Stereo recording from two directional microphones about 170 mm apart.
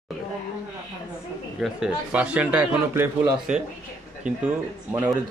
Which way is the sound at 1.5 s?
5° right (ahead or behind).